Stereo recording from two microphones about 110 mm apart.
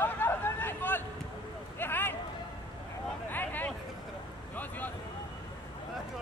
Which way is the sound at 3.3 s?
15° left (ahead or behind).